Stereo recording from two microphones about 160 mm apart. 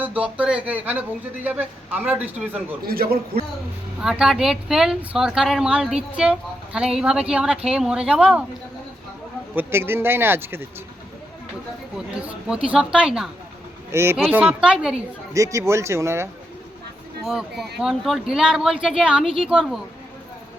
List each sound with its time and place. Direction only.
0.0 s speech: 10° right (ahead or behind)
2.8 s a man's voice: 70° right (ahead or behind)
4.0 s speech: 5° right (ahead or behind)
9.6 s speech: 15° right (ahead or behind)
11.9 s speech: 5° right (ahead or behind)
13.9 s speech: 15° right (ahead or behind)
15.3 s speech: 20° right (ahead or behind)
17.2 s speech: centre (ahead or behind)